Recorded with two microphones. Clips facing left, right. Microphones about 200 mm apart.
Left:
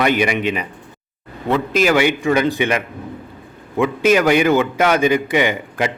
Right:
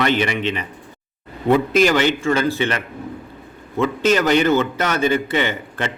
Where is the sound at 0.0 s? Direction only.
10° left (ahead or behind).